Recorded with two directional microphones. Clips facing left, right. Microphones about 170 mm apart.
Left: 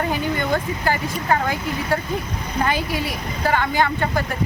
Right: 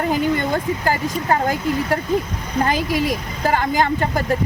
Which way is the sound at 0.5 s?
40° right (ahead or behind).